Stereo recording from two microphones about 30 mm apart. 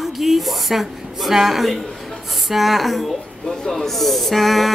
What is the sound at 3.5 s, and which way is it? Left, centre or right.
Speech, centre.